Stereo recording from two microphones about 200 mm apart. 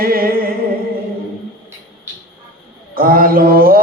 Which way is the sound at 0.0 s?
45° right (ahead or behind).